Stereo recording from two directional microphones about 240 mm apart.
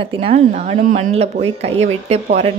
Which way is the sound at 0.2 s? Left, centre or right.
Right.